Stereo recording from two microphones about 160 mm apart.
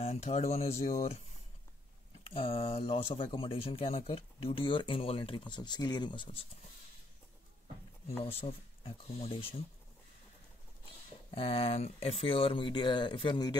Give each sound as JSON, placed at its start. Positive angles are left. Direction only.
{"t": 0.0, "sound": "speech", "side_deg": 40}
{"t": 2.2, "sound": "speech", "side_deg": 35}
{"t": 8.2, "sound": "speech", "side_deg": 35}
{"t": 11.3, "sound": "speech", "side_deg": 35}